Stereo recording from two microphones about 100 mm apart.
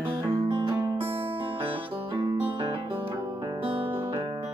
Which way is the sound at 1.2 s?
65° right (ahead or behind).